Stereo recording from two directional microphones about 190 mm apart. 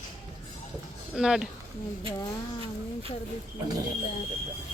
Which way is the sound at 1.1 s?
5° right (ahead or behind).